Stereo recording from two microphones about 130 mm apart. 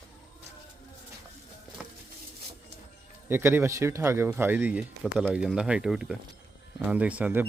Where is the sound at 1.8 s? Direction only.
10° right (ahead or behind).